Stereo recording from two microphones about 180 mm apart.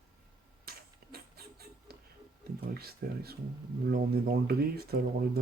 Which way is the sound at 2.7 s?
60° right (ahead or behind).